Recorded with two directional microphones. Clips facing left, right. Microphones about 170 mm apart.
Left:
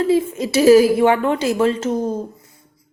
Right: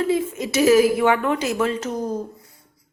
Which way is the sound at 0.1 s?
30° left (ahead or behind).